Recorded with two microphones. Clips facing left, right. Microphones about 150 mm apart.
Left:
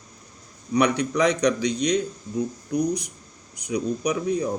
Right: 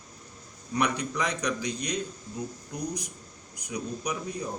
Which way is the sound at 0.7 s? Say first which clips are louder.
Left 7 dB; 70° left (ahead or behind).